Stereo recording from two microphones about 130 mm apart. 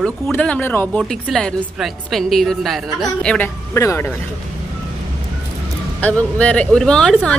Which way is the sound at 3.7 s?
20° left (ahead or behind).